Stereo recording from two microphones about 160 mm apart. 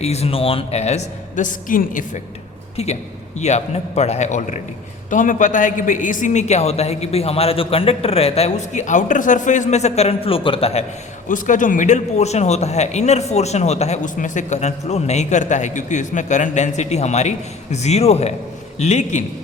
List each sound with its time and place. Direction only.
0.0 s a man's voice: 40° left (ahead or behind)
2.7 s a man's voice: 45° left (ahead or behind)
11.3 s a man's voice: 55° left (ahead or behind)